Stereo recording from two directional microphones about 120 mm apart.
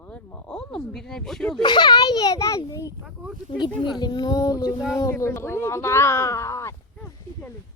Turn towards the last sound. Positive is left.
turn(degrees=25)  # may be behind; listen again after turning